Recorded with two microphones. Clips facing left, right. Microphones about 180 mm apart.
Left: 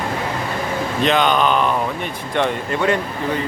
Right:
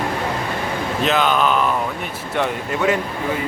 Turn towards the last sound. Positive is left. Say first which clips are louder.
# left 1 dB
turn(degrees=-5)  # may be behind; listen again after turning